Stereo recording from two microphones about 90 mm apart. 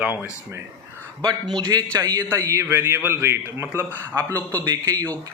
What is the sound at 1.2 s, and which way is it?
Speech, 50° right (ahead or behind).